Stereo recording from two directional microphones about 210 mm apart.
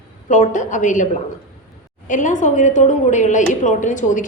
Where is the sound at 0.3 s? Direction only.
35° left (ahead or behind).